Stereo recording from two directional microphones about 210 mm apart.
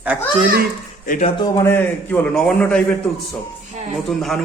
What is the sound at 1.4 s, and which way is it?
A child's voice, 15° left (ahead or behind).